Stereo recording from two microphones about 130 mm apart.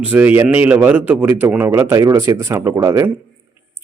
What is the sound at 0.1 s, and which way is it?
A man's voice, 15° right (ahead or behind).